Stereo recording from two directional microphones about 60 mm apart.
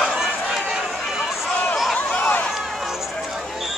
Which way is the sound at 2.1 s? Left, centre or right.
Centre.